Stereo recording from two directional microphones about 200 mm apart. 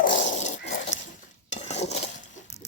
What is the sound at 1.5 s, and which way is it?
Cutlery, 35° left (ahead or behind).